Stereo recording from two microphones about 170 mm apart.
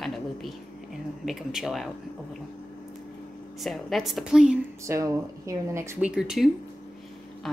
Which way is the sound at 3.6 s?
Centre (ahead or behind).